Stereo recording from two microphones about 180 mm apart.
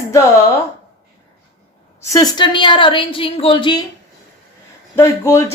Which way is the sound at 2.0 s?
20° left (ahead or behind).